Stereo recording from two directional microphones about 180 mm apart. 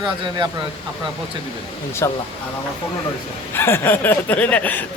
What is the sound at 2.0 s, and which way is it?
Speech, 15° left (ahead or behind).